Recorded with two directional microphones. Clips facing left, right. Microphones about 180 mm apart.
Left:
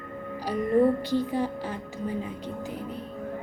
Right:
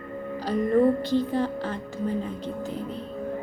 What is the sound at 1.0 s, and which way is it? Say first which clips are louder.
Speech: right 2 dB; 10° left (ahead or behind).